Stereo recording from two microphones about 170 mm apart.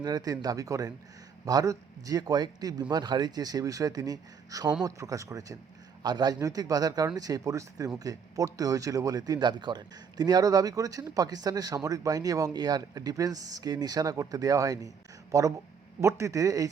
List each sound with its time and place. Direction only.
0.0 s a man's voice: 20° right (ahead or behind)